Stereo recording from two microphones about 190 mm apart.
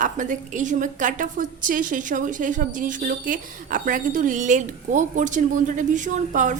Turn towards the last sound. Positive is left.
turn(degrees=-40)  # may be behind; listen again after turning